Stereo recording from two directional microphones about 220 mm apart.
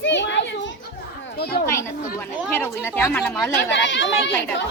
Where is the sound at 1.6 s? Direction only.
10° left (ahead or behind).